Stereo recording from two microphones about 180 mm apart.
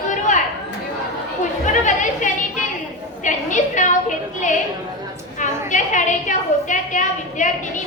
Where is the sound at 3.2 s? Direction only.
45° left (ahead or behind).